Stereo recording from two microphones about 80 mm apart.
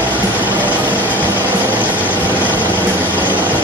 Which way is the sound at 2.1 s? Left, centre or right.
Centre.